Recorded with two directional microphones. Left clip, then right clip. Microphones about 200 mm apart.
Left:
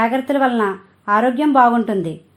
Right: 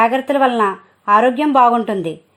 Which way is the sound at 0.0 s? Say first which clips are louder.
Right 3 dB; 35° right (ahead or behind).